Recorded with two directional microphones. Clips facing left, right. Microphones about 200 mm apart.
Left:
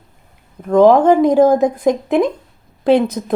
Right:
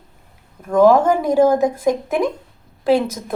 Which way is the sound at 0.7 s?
20° left (ahead or behind).